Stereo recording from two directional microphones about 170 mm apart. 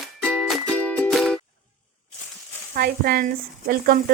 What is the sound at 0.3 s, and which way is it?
Music, centre (ahead or behind).